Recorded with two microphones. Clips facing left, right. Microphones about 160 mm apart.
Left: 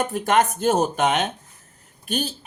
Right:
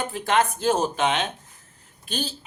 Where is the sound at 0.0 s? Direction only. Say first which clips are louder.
Left 3 dB; 45° left (ahead or behind).